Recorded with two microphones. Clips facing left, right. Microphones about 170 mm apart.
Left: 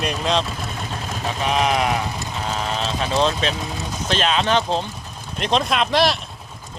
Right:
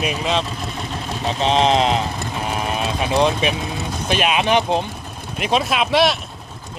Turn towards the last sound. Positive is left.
turn(degrees=0)  # may be behind; listen again after turning